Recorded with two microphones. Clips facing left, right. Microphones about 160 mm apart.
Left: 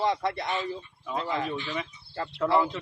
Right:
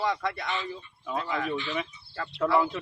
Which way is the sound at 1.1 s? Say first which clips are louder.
Even; 25° left (ahead or behind).